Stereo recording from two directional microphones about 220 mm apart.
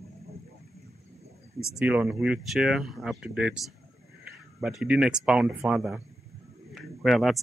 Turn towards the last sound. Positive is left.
turn(degrees=0)  # may be behind; listen again after turning